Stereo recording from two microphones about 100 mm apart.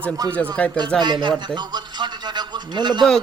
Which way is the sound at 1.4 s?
50° right (ahead or behind).